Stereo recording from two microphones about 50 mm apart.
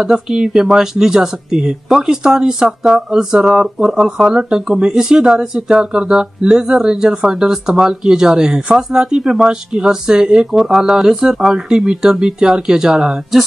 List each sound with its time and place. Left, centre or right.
0.0 s speech: centre